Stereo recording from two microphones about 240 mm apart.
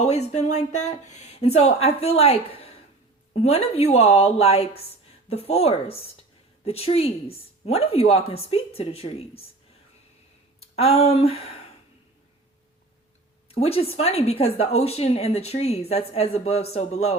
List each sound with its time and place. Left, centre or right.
0.0 s a woman's voice: left
10.8 s a woman's voice: left
13.5 s a woman's voice: left